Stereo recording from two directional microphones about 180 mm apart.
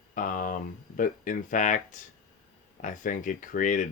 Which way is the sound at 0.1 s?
50° left (ahead or behind).